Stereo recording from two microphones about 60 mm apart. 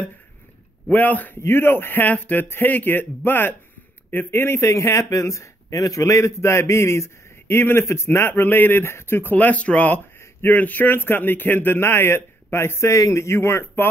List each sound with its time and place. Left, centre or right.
0.9 s speech: left
1.4 s a man's voice: left
9.3 s a man's voice: left